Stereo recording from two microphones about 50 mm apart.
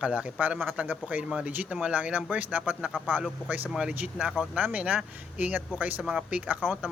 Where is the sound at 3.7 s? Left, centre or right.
Centre.